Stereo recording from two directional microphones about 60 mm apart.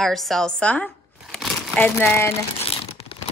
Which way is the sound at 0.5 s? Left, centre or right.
Left.